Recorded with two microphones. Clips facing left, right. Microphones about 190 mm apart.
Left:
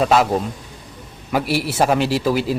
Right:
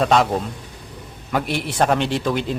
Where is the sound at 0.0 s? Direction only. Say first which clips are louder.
Left 1 dB; 5° left (ahead or behind).